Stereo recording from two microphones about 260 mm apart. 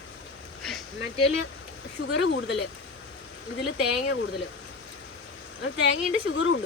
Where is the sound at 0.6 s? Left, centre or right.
Centre.